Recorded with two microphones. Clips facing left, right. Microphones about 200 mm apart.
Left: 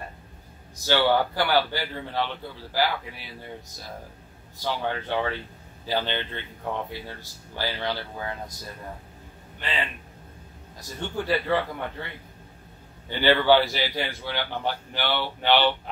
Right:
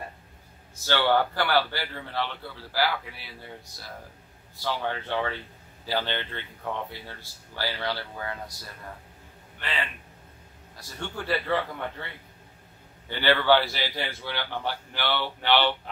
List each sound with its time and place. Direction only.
0.8 s a man's voice: 10° left (ahead or behind)
4.6 s a man's voice: 15° left (ahead or behind)
9.6 s a man's voice: 15° left (ahead or behind)
11.0 s a man's voice: 15° left (ahead or behind)
13.1 s a man's voice: 15° left (ahead or behind)